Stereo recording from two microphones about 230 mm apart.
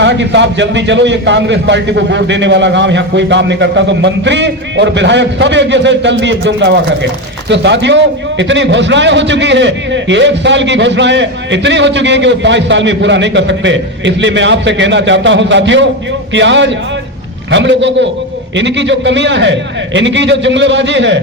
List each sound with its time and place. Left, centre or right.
0.0 s a man's voice: right